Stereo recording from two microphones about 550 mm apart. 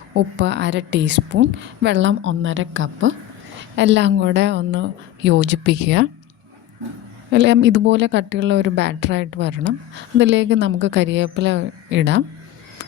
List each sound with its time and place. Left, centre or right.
0.1 s speech: centre
7.3 s speech: centre